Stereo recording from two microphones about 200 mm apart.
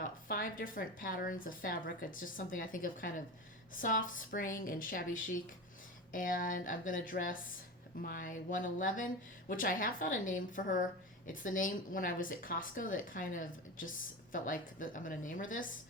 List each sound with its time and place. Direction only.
0.3 s a woman's voice: 45° left (ahead or behind)